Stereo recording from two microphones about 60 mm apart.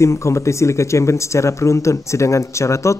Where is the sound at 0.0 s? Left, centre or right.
Left.